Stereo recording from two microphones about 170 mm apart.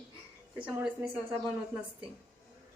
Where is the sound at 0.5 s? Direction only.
5° right (ahead or behind).